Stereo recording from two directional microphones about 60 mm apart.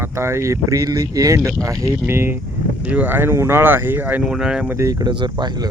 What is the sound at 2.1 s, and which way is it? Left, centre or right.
Speech, right.